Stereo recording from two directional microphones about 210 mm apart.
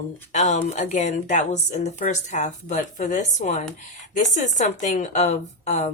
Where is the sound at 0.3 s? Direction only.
35° left (ahead or behind).